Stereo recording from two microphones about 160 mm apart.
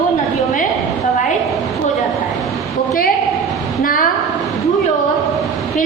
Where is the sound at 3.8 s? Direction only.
60° left (ahead or behind).